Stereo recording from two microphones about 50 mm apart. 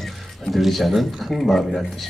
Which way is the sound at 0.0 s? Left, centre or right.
Centre.